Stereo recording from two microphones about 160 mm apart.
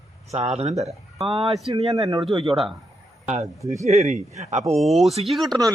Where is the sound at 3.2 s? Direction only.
40° right (ahead or behind).